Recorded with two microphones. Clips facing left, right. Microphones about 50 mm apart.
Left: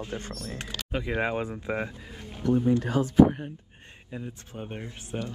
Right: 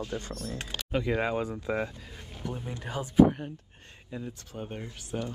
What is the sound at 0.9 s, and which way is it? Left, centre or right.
Speech, centre.